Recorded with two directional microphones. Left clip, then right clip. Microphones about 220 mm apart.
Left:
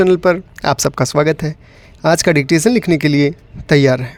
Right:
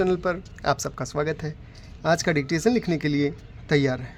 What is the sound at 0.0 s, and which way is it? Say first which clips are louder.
Speech: left 12 dB; 40° left (ahead or behind).